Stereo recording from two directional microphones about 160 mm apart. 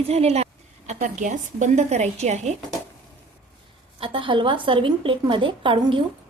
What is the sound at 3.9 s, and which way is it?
A woman's voice, 35° right (ahead or behind).